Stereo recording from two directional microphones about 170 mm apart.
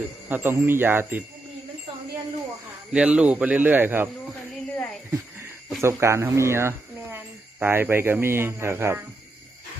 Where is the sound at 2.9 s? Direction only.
5° right (ahead or behind).